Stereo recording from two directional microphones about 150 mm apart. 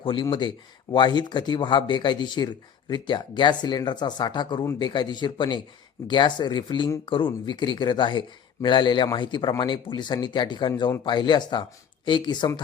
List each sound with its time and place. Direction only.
0.0 s speech: 35° left (ahead or behind)